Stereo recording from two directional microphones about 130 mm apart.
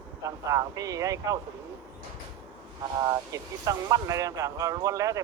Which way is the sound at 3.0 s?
25° right (ahead or behind).